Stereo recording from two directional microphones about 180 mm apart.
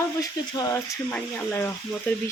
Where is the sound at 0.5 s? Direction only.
20° left (ahead or behind).